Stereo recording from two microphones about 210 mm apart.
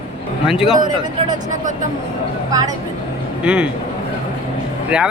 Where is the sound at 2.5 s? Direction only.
15° right (ahead or behind).